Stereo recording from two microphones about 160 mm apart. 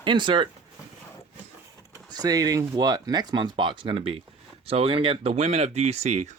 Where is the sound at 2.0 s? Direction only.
25° right (ahead or behind).